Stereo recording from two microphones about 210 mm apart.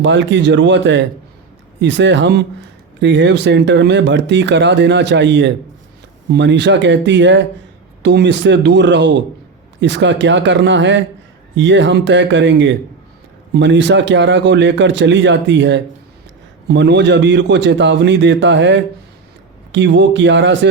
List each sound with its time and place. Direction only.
0.0 s speech: 60° right (ahead or behind)